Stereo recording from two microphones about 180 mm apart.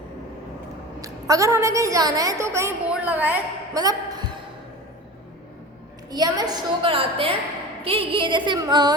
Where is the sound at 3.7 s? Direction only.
20° right (ahead or behind).